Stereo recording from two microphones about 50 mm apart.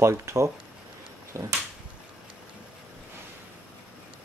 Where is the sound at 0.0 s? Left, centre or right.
Right.